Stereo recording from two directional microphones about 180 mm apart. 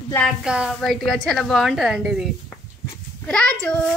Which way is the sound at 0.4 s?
5° right (ahead or behind).